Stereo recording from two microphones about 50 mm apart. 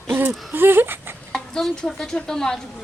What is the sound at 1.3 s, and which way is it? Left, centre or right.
Speech, centre.